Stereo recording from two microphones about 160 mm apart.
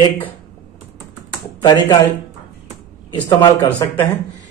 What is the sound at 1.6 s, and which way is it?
Speech, 25° left (ahead or behind).